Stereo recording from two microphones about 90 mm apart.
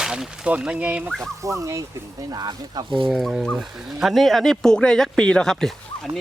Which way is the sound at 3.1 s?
5° right (ahead or behind).